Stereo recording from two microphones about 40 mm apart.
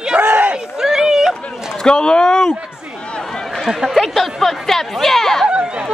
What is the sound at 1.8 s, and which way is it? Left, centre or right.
Speech, left.